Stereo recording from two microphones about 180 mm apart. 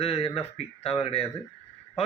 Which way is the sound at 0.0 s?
35° left (ahead or behind).